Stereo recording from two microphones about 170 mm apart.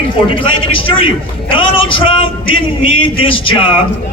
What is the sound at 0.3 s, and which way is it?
A man's voice, 30° left (ahead or behind).